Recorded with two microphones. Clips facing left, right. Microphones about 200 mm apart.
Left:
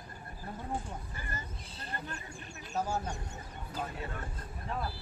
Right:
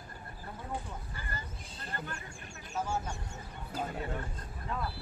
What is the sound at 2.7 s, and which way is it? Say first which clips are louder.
Speech: left 1 dB; 35° left (ahead or behind).